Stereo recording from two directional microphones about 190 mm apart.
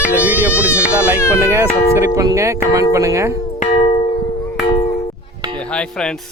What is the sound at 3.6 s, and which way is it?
Music, 35° left (ahead or behind).